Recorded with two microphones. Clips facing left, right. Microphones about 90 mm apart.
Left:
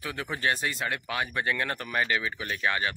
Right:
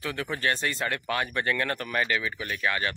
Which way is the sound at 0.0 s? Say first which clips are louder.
Right 1 dB; 15° left (ahead or behind).